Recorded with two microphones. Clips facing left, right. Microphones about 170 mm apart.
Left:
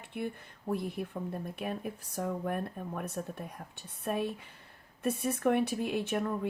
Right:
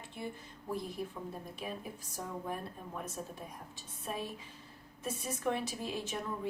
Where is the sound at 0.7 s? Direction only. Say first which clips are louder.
Left 4 dB; 60° left (ahead or behind).